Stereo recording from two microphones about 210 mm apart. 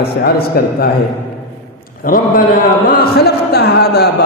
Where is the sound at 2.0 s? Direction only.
40° left (ahead or behind).